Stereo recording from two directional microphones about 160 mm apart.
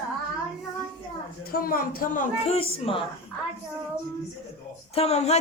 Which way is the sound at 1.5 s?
65° left (ahead or behind).